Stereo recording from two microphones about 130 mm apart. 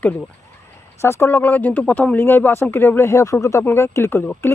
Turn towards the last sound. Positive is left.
turn(degrees=20)  # may be behind; listen again after turning